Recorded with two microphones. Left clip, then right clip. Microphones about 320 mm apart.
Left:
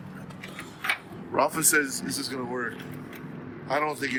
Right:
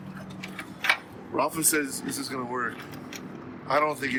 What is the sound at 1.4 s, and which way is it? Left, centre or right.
Speech, centre.